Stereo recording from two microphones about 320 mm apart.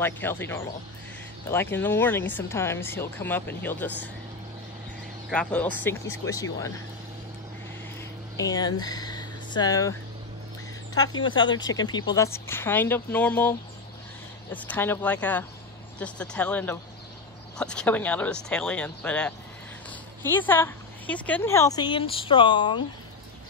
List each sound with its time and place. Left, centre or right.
0.0 s speech: centre
5.3 s speech: centre
8.4 s speech: centre
11.2 s speech: centre